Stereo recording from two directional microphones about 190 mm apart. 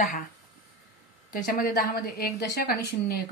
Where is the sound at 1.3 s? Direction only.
50° left (ahead or behind).